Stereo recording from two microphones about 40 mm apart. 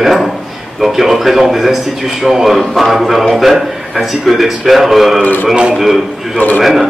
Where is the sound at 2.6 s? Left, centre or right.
Centre.